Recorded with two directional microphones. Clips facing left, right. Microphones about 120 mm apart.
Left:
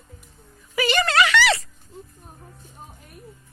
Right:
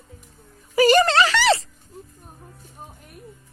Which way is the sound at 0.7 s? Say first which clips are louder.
Right 7 dB; 40° right (ahead or behind).